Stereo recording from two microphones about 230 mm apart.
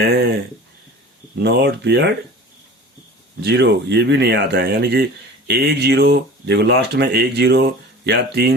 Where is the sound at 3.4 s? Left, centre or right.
Right.